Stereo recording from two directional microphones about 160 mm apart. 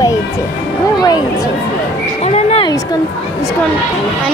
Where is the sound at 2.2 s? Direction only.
40° left (ahead or behind).